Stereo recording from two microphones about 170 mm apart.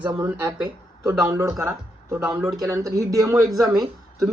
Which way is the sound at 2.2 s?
Centre (ahead or behind).